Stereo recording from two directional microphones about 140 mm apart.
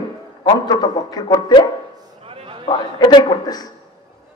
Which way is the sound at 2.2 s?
40° right (ahead or behind).